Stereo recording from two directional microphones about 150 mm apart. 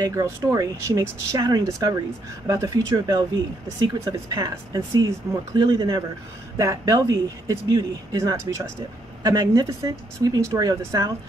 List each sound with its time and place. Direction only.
0.0 s speech: 20° right (ahead or behind)